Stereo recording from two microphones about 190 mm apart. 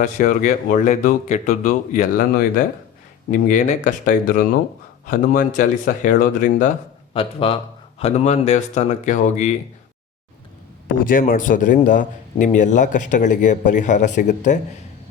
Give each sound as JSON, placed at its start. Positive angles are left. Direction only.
{"t": 0.0, "sound": "a man's voice", "side_deg": 45}
{"t": 7.1, "sound": "a man's voice", "side_deg": 30}
{"t": 10.9, "sound": "a man's voice", "side_deg": 45}